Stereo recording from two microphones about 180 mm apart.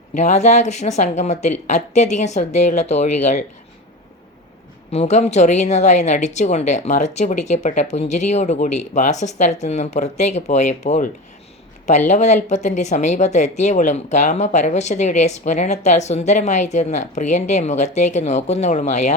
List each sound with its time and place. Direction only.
0.1 s speech: 40° left (ahead or behind)
4.9 s speech: 40° left (ahead or behind)